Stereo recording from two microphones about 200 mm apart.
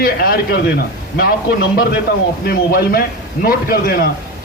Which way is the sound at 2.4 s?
50° left (ahead or behind).